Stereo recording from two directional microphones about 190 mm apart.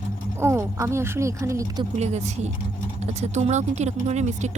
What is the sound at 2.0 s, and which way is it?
Speech, 35° right (ahead or behind).